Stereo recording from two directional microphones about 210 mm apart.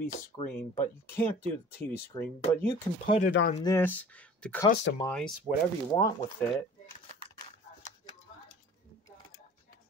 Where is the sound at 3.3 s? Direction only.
55° left (ahead or behind).